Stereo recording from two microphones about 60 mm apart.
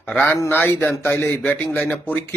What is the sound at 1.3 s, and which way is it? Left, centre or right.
Speech, left.